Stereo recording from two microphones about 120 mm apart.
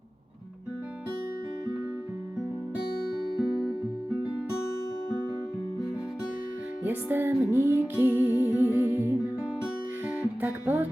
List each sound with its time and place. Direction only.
3.3 s music: centre (ahead or behind)
6.8 s music: 15° right (ahead or behind)
10.4 s music: 15° right (ahead or behind)